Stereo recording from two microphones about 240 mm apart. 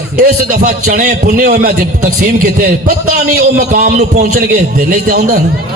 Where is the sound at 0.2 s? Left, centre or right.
Right.